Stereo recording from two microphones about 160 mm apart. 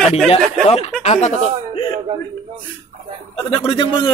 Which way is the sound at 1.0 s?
40° left (ahead or behind).